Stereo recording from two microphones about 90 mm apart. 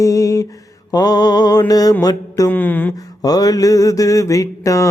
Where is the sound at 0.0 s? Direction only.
35° left (ahead or behind).